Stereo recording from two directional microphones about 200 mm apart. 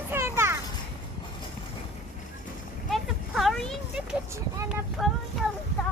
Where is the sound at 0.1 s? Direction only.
10° right (ahead or behind).